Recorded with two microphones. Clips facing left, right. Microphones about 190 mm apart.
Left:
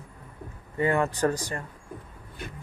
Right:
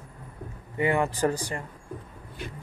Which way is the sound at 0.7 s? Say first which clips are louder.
Even; 15° right (ahead or behind).